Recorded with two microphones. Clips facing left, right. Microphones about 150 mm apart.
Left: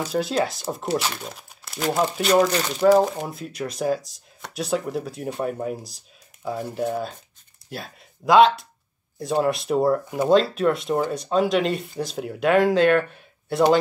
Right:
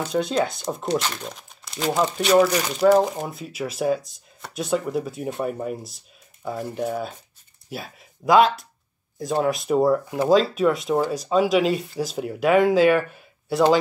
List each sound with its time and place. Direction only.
0.0 s speech: 5° left (ahead or behind)